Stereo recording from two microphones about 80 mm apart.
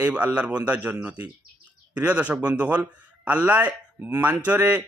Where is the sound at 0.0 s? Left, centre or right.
Centre.